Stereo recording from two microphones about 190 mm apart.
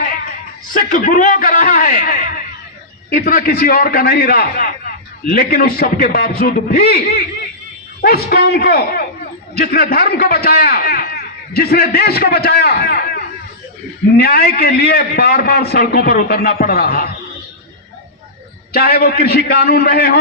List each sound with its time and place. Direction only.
0.7 s a man's voice: 45° left (ahead or behind)
8.0 s a man's voice: 55° left (ahead or behind)
18.7 s a man's voice: 55° left (ahead or behind)